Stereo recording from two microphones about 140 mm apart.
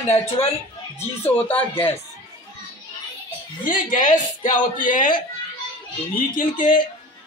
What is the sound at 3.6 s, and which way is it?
A woman's voice, 70° left (ahead or behind).